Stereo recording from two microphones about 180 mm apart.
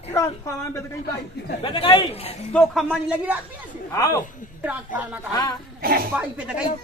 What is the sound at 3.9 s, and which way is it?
Speech, 15° left (ahead or behind).